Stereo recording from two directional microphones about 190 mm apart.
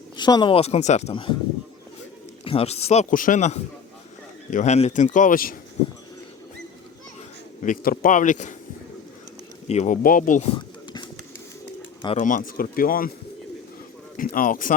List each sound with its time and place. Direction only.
0.2 s speech: 20° left (ahead or behind)
2.4 s a man's voice: 30° left (ahead or behind); by 5.5 s 50° left (ahead or behind)
7.6 s a man's voice: 45° left (ahead or behind)
9.6 s speech: 40° left (ahead or behind)
12.1 s speech: 45° left (ahead or behind)
14.2 s speech: 45° left (ahead or behind)